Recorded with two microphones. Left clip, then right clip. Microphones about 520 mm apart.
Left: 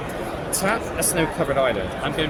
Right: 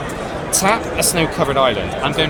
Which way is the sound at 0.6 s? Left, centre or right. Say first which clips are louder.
Right 7 dB; left.